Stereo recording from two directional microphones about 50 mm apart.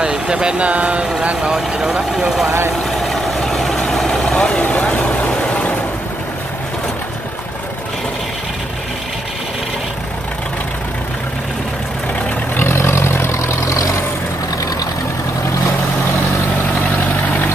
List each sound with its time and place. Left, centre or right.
0.0 s speech: centre
1.5 s speech: centre
2.9 s vehicle: centre
4.4 s vehicle: left
12.5 s vehicle: left